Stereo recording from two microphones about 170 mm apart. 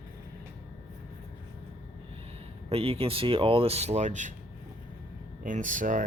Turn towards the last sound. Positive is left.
turn(degrees=-50)  # may be behind; listen again after turning